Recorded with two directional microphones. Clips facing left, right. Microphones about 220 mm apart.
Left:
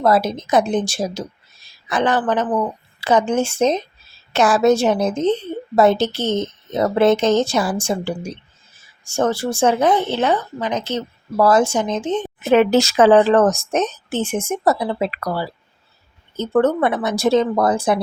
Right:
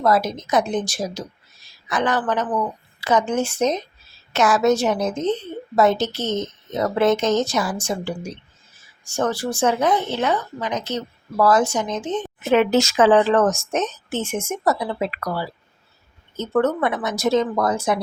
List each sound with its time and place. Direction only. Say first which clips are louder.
0.0 s a woman's voice: left 3 dB; 30° left (ahead or behind)